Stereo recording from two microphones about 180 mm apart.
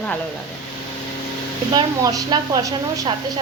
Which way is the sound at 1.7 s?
20° right (ahead or behind).